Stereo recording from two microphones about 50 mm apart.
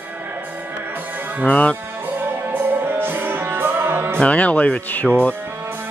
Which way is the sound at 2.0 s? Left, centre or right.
Right.